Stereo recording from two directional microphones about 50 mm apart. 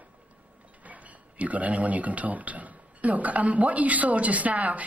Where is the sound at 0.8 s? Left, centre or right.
Right.